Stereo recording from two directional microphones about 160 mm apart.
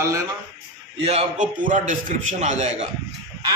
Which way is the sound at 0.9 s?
40° right (ahead or behind).